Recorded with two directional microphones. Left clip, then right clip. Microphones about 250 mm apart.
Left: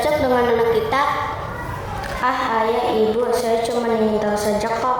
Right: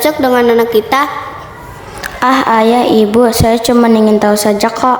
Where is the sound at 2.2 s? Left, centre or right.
Right.